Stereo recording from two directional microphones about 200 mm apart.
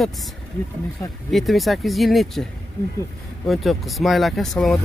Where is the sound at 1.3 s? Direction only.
Centre (ahead or behind).